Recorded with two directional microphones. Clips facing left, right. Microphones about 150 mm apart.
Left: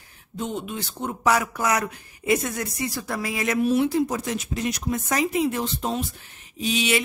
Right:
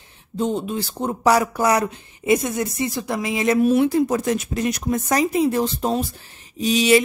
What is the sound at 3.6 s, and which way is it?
Speech, 50° right (ahead or behind).